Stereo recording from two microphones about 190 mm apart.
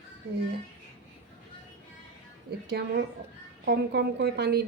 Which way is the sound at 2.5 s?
60° right (ahead or behind).